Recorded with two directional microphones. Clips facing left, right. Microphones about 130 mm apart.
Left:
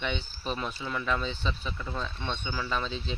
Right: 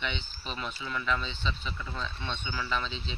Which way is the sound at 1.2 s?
45° left (ahead or behind).